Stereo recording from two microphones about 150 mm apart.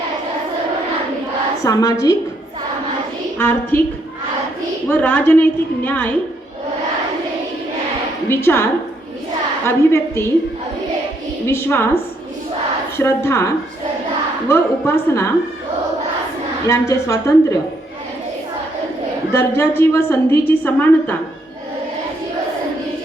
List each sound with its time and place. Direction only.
1.6 s a woman's voice: 25° left (ahead or behind)
3.3 s a woman's voice: 15° left (ahead or behind)
4.9 s a woman's voice: 10° left (ahead or behind)
8.3 s a woman's voice: 15° left (ahead or behind)
9.6 s a woman's voice: 15° left (ahead or behind)
11.4 s a woman's voice: 15° left (ahead or behind)
13.0 s a woman's voice: 15° left (ahead or behind)
16.6 s a woman's voice: 20° left (ahead or behind)
19.3 s a woman's voice: 15° left (ahead or behind)